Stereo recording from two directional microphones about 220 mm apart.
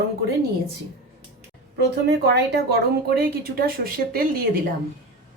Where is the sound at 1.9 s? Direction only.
50° right (ahead or behind).